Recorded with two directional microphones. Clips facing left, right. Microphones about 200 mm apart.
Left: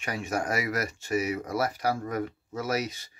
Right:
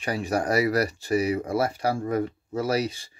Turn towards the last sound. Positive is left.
turn(degrees=-30)  # may be behind; listen again after turning